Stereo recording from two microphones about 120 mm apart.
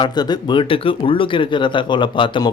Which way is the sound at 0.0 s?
40° left (ahead or behind).